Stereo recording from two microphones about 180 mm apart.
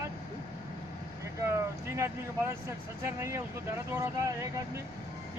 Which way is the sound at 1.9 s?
15° right (ahead or behind).